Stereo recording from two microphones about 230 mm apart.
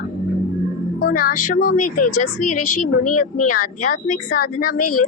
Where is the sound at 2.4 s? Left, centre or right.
Left.